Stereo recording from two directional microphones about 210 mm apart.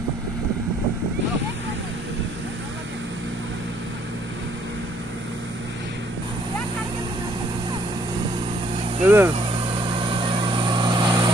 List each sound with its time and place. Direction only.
9.0 s speech: 10° right (ahead or behind)
10.1 s vehicle: 25° right (ahead or behind)